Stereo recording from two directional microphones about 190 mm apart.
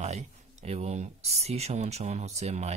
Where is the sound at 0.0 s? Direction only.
35° right (ahead or behind).